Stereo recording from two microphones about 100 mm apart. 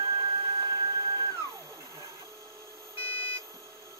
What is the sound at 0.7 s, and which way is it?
Printer, 35° right (ahead or behind).